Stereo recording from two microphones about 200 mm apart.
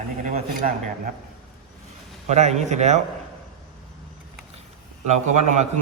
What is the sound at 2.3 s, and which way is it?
Speech, 35° right (ahead or behind).